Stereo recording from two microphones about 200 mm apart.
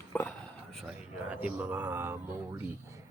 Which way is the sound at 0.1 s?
5° left (ahead or behind).